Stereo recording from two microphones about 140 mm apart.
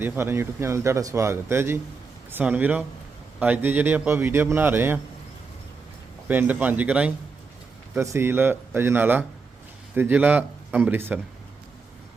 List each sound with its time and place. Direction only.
0.0 s a man's voice: 15° right (ahead or behind)
6.2 s a man's voice: 10° right (ahead or behind)
7.9 s a man's voice: 20° right (ahead or behind)